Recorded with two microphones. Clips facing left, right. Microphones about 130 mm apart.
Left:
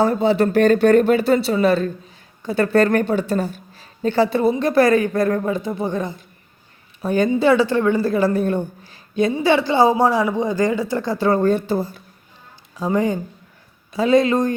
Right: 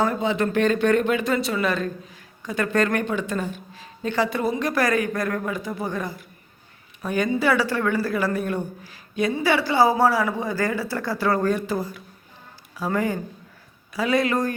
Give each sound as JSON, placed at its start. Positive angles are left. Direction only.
{"t": 0.0, "sound": "a woman's voice", "side_deg": 35}